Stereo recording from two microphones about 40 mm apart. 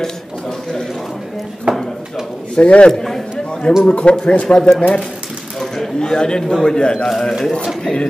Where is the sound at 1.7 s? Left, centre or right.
Right.